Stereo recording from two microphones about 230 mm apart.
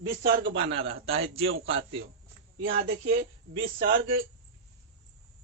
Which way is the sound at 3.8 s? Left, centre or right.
Right.